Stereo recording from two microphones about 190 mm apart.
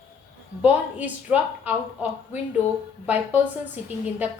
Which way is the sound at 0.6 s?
10° right (ahead or behind).